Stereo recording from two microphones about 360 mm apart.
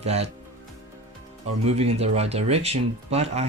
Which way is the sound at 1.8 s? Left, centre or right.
Centre.